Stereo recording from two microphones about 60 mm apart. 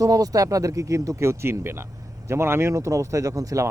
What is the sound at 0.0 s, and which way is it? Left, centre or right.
Speech, right.